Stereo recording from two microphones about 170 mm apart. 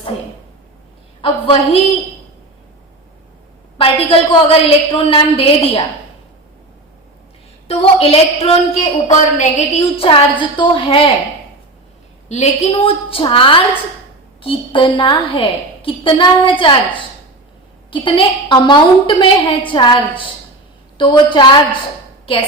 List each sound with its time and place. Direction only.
1.2 s a woman's voice: 35° left (ahead or behind)
3.8 s a woman's voice: 35° left (ahead or behind)
7.7 s a woman's voice: 35° left (ahead or behind)
12.3 s a woman's voice: 35° left (ahead or behind)
17.9 s a woman's voice: 30° left (ahead or behind)